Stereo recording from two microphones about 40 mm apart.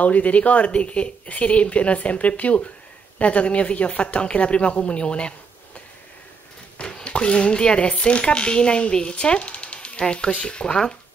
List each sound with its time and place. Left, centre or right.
0.0 s speech: left
6.8 s speech: left